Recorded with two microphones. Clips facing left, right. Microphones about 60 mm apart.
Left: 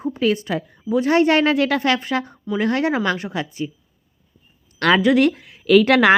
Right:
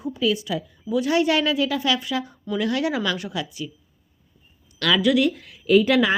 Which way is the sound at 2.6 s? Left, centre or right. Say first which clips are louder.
Left 4 dB; left.